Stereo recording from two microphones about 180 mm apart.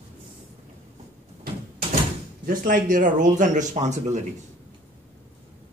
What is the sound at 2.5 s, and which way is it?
Speech, 50° right (ahead or behind).